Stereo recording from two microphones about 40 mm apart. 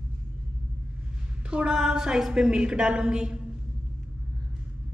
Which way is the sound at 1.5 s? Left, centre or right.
Right.